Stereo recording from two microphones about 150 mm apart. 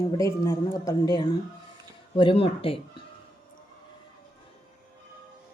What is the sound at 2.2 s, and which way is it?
Speech, 40° left (ahead or behind).